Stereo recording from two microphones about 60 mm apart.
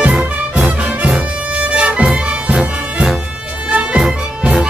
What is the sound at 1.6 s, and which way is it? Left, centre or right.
Music, right.